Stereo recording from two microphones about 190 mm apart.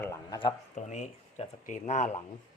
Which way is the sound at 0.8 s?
35° left (ahead or behind).